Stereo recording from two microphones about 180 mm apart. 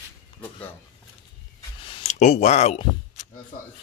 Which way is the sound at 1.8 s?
35° left (ahead or behind).